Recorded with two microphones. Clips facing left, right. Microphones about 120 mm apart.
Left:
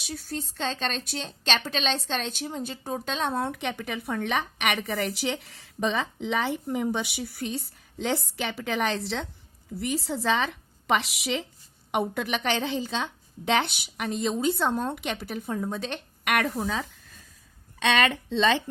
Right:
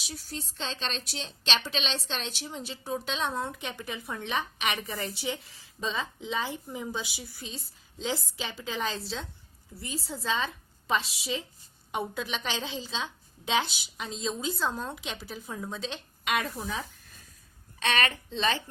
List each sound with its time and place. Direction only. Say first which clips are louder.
0.0 s a woman's voice: left 6 dB; 50° left (ahead or behind); by 11.4 s 80° left
11.9 s a woman's voice: left 6 dB; 65° left (ahead or behind); by 16.8 s 80° left
18.1 s speech: left 6 dB; 85° left